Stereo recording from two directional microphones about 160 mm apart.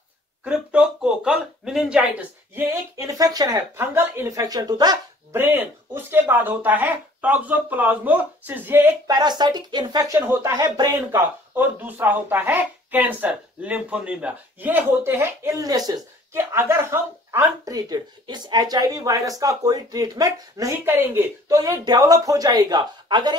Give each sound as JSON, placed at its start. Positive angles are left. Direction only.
{"t": 0.5, "sound": "speech", "side_deg": -5}
{"t": 5.3, "sound": "speech", "side_deg": -15}
{"t": 9.0, "sound": "speech", "side_deg": -25}
{"t": 10.1, "sound": "speech", "side_deg": -15}
{"t": 11.5, "sound": "speech", "side_deg": -10}